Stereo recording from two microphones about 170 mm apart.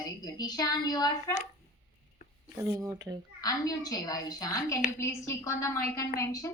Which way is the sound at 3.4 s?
20° left (ahead or behind).